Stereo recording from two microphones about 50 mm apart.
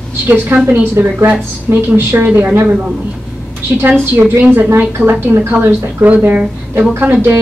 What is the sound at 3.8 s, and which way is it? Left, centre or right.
A woman's voice, right.